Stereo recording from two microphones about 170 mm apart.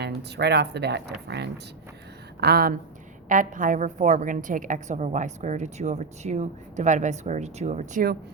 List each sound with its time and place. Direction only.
0.0 s speech: 80° right
2.4 s a woman's voice: 65° right (ahead or behind)
3.2 s a woman's voice: 50° right (ahead or behind)